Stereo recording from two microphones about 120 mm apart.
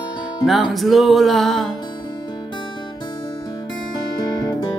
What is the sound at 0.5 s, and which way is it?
Music, centre (ahead or behind).